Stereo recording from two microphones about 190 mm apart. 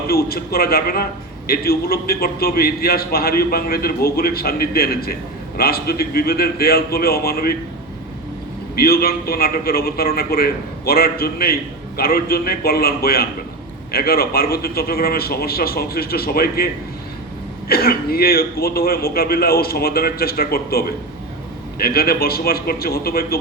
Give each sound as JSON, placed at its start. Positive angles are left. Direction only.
{"t": 0.1, "sound": "a man's voice", "side_deg": 55}
{"t": 8.7, "sound": "a man's voice", "side_deg": 55}
{"t": 17.7, "sound": "a man's voice", "side_deg": 55}